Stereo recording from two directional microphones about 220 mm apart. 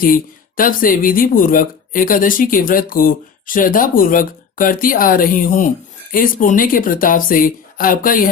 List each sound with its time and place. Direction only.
0.0 s speech: 40° left (ahead or behind)